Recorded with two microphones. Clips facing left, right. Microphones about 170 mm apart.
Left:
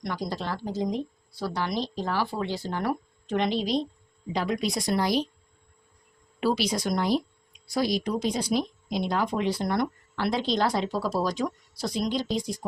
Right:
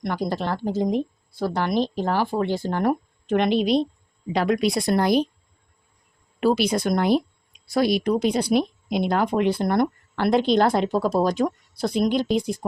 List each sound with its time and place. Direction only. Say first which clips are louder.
0.0 s speech: right 6 dB; 55° right (ahead or behind)
6.4 s speech: right 5 dB; 50° right (ahead or behind)